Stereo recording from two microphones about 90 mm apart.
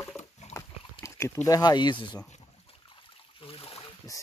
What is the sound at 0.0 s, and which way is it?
Dog, 30° left (ahead or behind).